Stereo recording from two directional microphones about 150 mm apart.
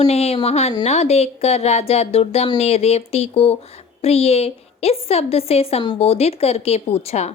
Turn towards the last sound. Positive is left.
turn(degrees=45)  # may be behind; listen again after turning